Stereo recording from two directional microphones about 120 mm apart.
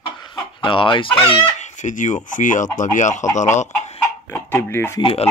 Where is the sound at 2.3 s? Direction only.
90° left.